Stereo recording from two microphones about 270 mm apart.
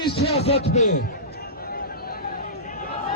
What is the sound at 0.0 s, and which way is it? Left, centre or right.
Speech, left.